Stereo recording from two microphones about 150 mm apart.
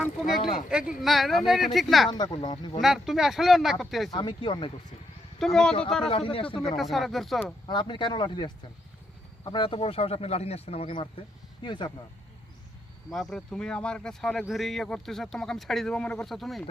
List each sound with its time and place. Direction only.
0.0 s speech: centre (ahead or behind)
2.0 s speech: 30° left (ahead or behind)
2.8 s speech: centre (ahead or behind)
4.1 s speech: 35° left (ahead or behind)
5.4 s speech: 5° left (ahead or behind)
6.1 s speech: 40° left (ahead or behind)
6.7 s speech: centre (ahead or behind)
7.7 s speech: 30° left (ahead or behind)
13.1 s speech: 5° left (ahead or behind)